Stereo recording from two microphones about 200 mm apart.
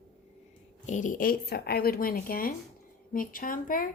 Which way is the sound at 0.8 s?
40° left (ahead or behind).